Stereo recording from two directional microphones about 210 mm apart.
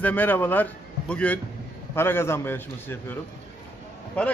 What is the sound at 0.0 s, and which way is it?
A man's voice, 10° left (ahead or behind).